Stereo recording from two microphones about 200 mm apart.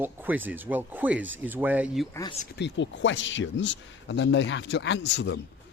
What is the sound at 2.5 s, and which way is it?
Speech, 60° left (ahead or behind).